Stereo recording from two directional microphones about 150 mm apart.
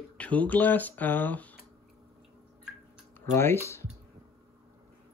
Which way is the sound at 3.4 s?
15° left (ahead or behind).